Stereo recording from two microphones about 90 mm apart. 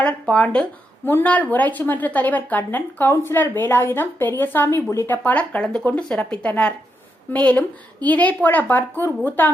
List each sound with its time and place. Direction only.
0.0 s a woman's voice: 10° left (ahead or behind)